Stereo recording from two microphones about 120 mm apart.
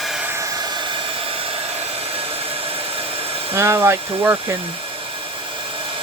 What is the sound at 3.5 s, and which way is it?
Speech, 20° right (ahead or behind).